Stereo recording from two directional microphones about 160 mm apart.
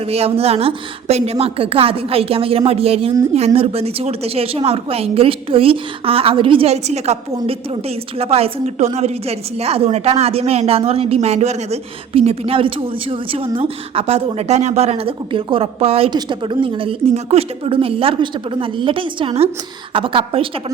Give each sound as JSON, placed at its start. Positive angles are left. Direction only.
{"t": 0.1, "sound": "a woman's voice", "side_deg": -40}
{"t": 8.2, "sound": "a woman's voice", "side_deg": -40}